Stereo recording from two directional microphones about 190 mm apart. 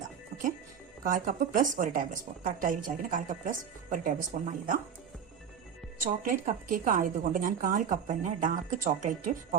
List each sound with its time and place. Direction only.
1.0 s a woman's voice: 45° right (ahead or behind)
6.4 s a woman's voice: 45° right (ahead or behind)